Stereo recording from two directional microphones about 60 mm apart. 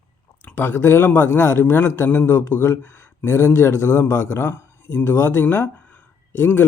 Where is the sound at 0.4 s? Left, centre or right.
Left.